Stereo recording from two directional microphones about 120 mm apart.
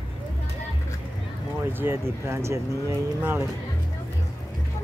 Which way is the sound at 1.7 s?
20° right (ahead or behind).